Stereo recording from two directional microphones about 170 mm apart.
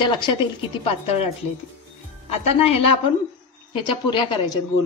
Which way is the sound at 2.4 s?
35° left (ahead or behind).